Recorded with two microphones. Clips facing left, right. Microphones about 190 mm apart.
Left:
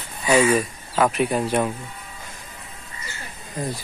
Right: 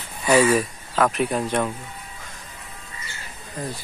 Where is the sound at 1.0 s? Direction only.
5° left (ahead or behind).